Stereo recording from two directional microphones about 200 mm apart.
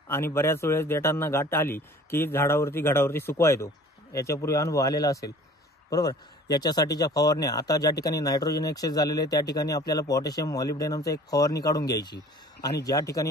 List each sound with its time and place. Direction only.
0.1 s speech: 10° left (ahead or behind)